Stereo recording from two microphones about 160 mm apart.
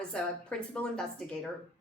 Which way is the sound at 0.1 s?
5° left (ahead or behind).